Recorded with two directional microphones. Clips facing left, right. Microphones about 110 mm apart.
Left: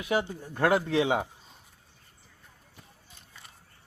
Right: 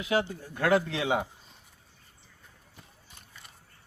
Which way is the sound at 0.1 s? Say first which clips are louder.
Even; 45° left (ahead or behind).